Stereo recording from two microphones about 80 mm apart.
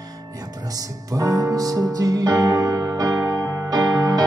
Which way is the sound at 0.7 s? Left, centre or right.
Right.